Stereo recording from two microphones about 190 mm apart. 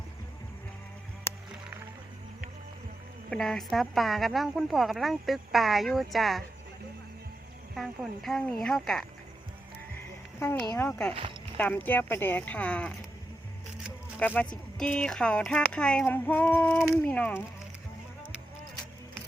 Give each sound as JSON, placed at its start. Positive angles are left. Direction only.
{"t": 3.2, "sound": "a woman's voice", "side_deg": 5}
{"t": 7.8, "sound": "a woman's voice", "side_deg": 0}
{"t": 10.4, "sound": "a woman's voice", "side_deg": 10}
{"t": 11.1, "sound": "speech", "side_deg": -30}
{"t": 11.5, "sound": "speech", "side_deg": 10}
{"t": 14.2, "sound": "speech", "side_deg": 5}